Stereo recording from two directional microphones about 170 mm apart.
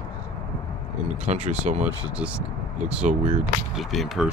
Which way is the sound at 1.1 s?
45° right (ahead or behind).